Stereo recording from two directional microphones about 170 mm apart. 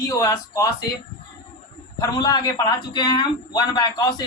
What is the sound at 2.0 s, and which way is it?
A man's voice, 25° left (ahead or behind).